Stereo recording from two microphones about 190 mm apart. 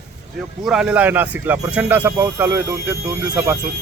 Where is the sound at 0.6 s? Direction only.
5° right (ahead or behind).